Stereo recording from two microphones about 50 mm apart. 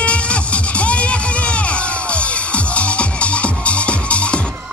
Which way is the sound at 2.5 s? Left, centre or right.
Left.